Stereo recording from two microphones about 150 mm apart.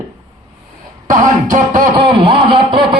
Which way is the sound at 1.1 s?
60° right (ahead or behind).